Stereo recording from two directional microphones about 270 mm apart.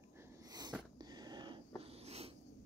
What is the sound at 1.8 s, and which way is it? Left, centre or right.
Wheeze, right.